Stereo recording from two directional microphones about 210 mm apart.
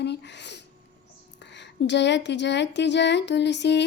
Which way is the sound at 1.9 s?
55° left (ahead or behind).